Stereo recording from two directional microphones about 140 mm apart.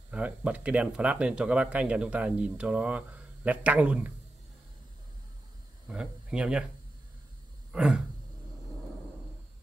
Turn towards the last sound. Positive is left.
turn(degrees=-5)  # may be behind; listen again after turning